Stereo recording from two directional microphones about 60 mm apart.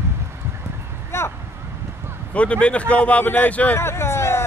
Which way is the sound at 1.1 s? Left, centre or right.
Left.